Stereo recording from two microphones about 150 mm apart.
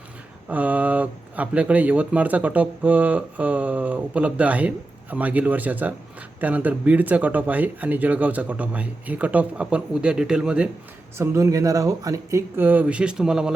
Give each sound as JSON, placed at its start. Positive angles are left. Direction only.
{"t": 0.4, "sound": "speech", "side_deg": -10}
{"t": 11.2, "sound": "speech", "side_deg": -20}